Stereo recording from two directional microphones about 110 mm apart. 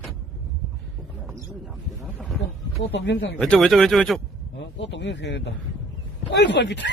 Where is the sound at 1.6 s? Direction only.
5° right (ahead or behind).